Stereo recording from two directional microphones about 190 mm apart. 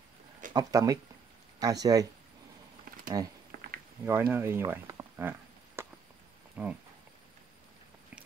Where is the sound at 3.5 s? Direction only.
50° right (ahead or behind).